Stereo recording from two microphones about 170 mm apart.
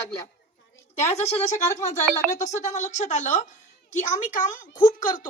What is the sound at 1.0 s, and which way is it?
Speech, 40° left (ahead or behind).